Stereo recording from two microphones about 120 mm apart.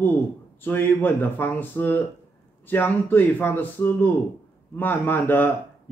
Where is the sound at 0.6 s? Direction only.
15° left (ahead or behind).